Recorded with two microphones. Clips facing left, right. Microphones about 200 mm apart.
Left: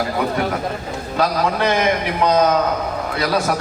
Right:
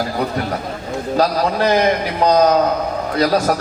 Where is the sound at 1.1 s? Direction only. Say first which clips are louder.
Right 2 dB; 40° right (ahead or behind).